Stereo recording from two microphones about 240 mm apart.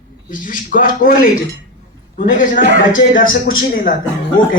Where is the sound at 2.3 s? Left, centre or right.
Left.